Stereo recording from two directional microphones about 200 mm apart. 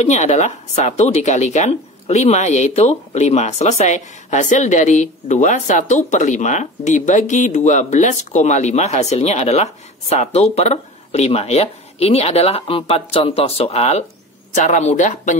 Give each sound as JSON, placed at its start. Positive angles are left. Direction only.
{"t": 0.0, "sound": "speech", "side_deg": 35}